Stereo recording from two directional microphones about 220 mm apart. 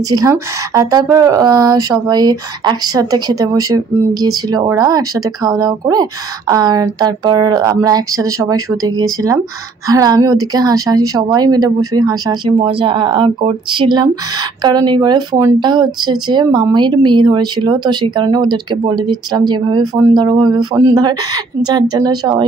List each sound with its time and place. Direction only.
0.1 s speech: 15° right (ahead or behind)